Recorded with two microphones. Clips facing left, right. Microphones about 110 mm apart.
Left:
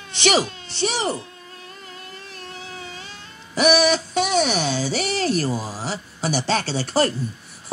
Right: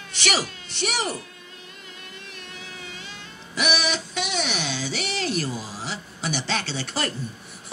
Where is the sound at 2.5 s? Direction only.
35° left (ahead or behind).